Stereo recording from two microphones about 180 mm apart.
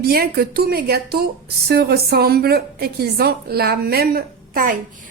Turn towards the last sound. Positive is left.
turn(degrees=-50)  # may be behind; listen again after turning